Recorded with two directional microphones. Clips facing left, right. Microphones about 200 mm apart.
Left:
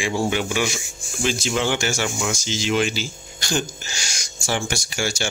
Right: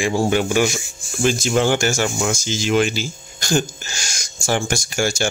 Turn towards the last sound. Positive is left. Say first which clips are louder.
# right 5 dB
turn(degrees=-45)  # may be behind; listen again after turning